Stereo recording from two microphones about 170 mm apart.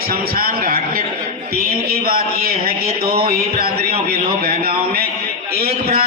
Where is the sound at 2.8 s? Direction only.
35° right (ahead or behind).